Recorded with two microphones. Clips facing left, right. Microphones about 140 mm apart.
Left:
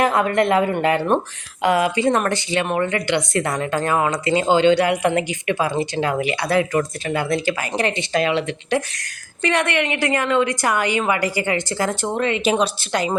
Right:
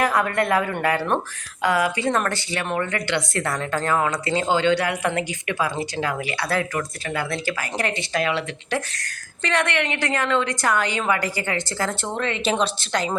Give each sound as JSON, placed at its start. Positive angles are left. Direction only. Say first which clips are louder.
{"t": 0.0, "sound": "speech", "louder": "left 4 dB", "side_deg": 20}